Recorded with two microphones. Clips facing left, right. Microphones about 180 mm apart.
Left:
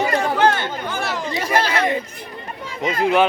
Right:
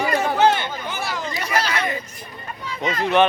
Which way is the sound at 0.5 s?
10° right (ahead or behind).